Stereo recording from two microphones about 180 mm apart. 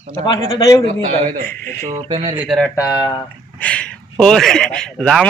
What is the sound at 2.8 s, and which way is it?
Speech, 20° left (ahead or behind).